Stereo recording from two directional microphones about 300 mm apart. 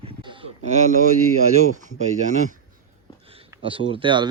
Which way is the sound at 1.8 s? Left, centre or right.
Right.